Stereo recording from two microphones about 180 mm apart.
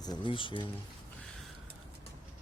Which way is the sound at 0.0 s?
25° left (ahead or behind).